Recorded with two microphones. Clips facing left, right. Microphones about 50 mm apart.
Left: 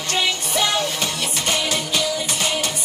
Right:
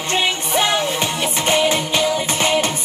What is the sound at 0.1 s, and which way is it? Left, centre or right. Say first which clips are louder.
Music: right 3 dB; right.